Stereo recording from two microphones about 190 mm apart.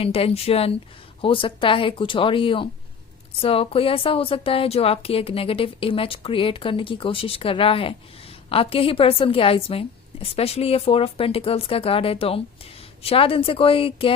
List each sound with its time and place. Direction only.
0.0 s speech: 30° left (ahead or behind)